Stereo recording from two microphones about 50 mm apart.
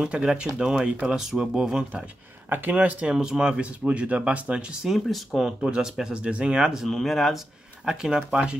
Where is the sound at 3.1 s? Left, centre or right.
Centre.